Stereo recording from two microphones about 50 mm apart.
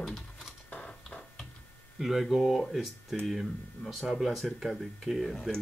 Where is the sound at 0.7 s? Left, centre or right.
Left.